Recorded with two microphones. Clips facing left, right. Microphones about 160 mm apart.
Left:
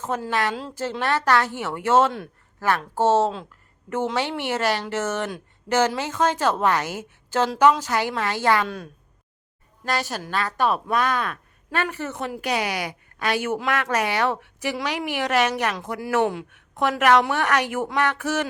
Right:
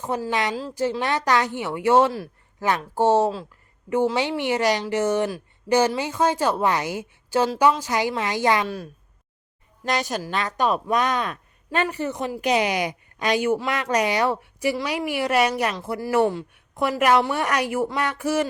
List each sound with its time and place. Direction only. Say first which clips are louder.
0.0 s a woman's voice: even; 10° right (ahead or behind)
8.6 s speech: right 1 dB; 5° right (ahead or behind)
9.8 s a woman's voice: right 2 dB; 15° right (ahead or behind)
16.6 s a sound: left 1 dB; 10° right (ahead or behind)
17.4 s a woman's voice: even; 10° right (ahead or behind)